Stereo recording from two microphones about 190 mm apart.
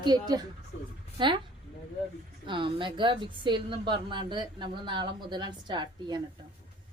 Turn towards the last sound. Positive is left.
turn(degrees=-25)  # may be behind; listen again after turning